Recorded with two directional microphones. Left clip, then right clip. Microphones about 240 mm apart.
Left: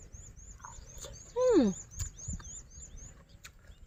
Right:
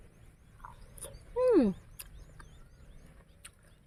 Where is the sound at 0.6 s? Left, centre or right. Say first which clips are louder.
Left 1 dB; centre.